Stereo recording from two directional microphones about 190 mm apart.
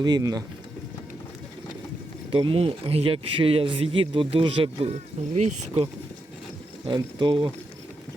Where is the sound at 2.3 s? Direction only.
30° right (ahead or behind).